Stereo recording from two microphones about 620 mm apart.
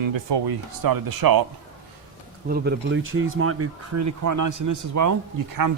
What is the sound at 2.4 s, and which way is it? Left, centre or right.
Speech, centre.